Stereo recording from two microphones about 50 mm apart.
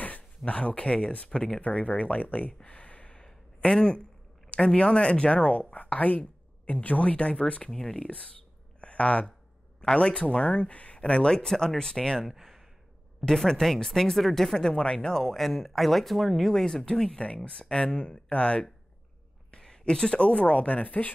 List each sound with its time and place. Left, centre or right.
0.5 s speech: left
1.6 s speech: left
3.3 s a sound: centre
4.5 s speech: centre
8.8 s a sound: left
9.9 s speech: left
12.3 s sigh: centre
13.2 s speech: centre
14.7 s speech: centre